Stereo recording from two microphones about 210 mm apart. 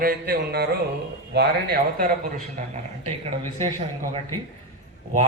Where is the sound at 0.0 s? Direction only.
45° right (ahead or behind).